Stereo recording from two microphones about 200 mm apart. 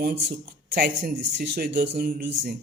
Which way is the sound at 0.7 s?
50° right (ahead or behind).